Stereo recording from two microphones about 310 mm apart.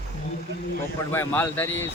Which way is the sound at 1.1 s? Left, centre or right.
Centre.